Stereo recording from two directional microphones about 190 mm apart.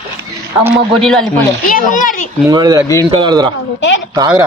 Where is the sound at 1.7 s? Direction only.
45° left (ahead or behind).